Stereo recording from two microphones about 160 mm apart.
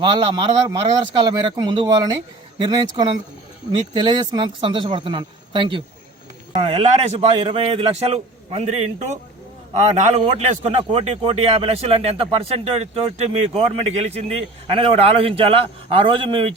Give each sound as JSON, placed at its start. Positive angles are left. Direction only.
{"t": 0.0, "sound": "a man's voice", "side_deg": -30}